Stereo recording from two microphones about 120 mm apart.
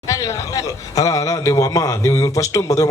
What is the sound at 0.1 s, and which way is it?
Speech, 25° left (ahead or behind).